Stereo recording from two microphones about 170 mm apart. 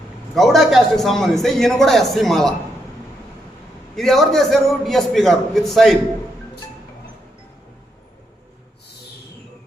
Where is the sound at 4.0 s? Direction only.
Centre (ahead or behind).